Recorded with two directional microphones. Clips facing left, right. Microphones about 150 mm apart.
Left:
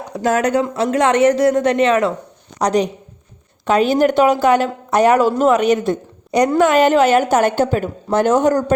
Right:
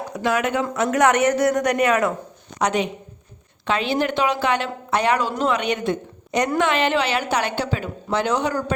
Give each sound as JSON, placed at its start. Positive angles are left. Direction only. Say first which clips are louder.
{"t": 0.1, "sound": "speech", "louder": "left 6 dB", "side_deg": 40}
{"t": 0.6, "sound": "a woman's voice", "louder": "left 2 dB", "side_deg": 25}
{"t": 2.6, "sound": "a woman's voice", "louder": "left 5 dB", "side_deg": 35}